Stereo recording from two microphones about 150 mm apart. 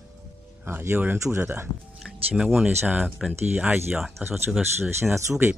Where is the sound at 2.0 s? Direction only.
5° right (ahead or behind).